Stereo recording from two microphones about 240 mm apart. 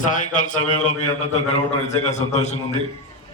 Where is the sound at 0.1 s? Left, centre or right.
Left.